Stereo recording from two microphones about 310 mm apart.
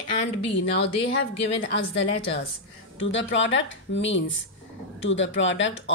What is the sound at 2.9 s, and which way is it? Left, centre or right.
Speech, left.